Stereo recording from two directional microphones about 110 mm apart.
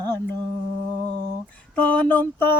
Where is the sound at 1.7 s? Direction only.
10° left (ahead or behind).